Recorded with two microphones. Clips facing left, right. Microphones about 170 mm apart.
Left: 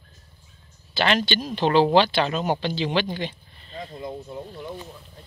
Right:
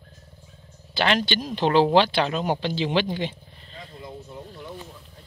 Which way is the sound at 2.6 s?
15° right (ahead or behind).